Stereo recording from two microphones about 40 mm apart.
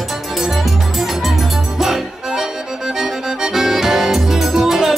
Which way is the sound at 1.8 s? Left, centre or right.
Centre.